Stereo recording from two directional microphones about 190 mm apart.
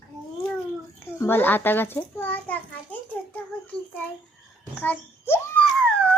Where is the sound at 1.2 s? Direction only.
10° left (ahead or behind).